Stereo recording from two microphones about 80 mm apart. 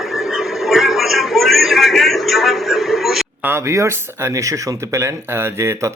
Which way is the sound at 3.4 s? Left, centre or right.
Right.